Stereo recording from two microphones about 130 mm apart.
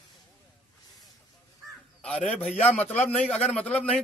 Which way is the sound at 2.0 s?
10° left (ahead or behind).